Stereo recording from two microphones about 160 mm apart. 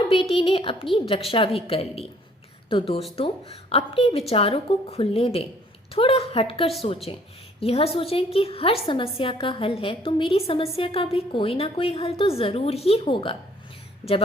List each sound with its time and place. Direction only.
0.1 s a woman's voice: 35° left (ahead or behind)